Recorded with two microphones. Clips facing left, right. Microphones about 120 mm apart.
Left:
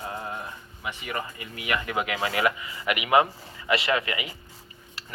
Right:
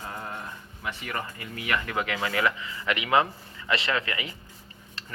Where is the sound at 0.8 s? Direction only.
15° left (ahead or behind).